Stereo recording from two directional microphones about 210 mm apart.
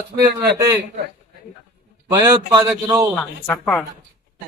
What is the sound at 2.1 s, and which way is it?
Speech, 15° right (ahead or behind).